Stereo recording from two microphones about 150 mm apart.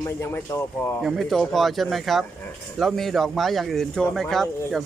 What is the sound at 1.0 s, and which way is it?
Speech, centre (ahead or behind).